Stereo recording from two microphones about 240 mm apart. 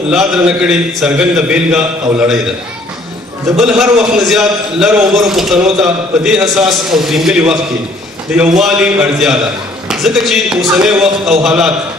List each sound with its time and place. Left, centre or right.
0.1 s a man's voice: centre
3.5 s a man's voice: centre